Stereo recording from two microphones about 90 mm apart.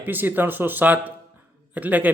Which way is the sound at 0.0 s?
20° right (ahead or behind).